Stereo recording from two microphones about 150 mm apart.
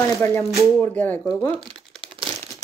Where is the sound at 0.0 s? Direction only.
20° left (ahead or behind).